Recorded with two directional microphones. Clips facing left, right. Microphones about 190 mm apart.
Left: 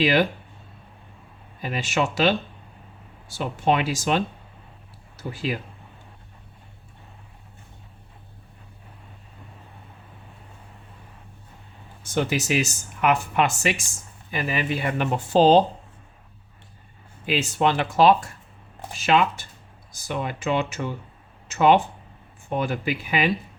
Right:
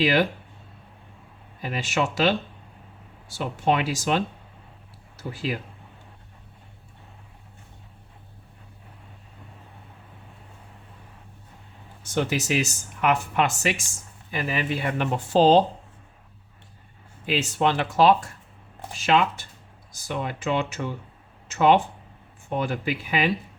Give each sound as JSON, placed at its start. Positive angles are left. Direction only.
{"t": 0.0, "sound": "speech", "side_deg": 20}
{"t": 1.6, "sound": "speech", "side_deg": 20}
{"t": 3.3, "sound": "speech", "side_deg": 20}
{"t": 5.5, "sound": "speech", "side_deg": 20}
{"t": 12.0, "sound": "speech", "side_deg": 10}
{"t": 17.2, "sound": "speech", "side_deg": 15}